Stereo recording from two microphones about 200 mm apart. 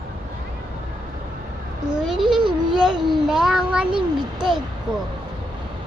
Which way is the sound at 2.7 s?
5° right (ahead or behind).